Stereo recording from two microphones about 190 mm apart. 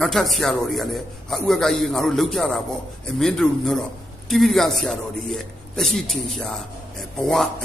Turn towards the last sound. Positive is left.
turn(degrees=0)  # may be behind; listen again after turning